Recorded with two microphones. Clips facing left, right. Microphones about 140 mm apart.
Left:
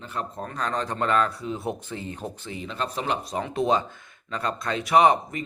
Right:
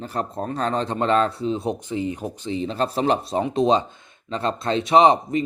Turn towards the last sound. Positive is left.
turn(degrees=-25)  # may be behind; listen again after turning